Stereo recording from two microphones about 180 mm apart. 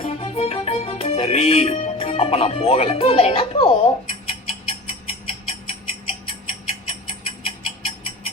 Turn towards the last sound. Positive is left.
turn(degrees=30)  # may be behind; listen again after turning